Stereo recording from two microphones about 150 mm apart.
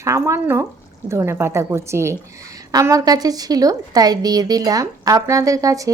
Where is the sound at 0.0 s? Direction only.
20° right (ahead or behind).